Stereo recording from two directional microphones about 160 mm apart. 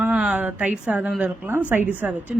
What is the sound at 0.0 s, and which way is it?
A woman's voice, 5° right (ahead or behind).